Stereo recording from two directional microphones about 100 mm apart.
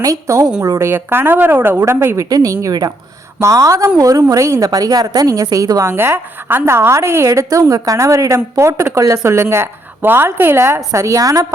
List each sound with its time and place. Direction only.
0.0 s a woman's voice: 35° right (ahead or behind)
5.9 s a woman's voice: 25° right (ahead or behind)